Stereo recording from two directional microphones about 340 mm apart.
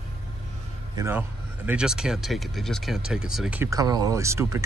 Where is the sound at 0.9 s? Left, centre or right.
Centre.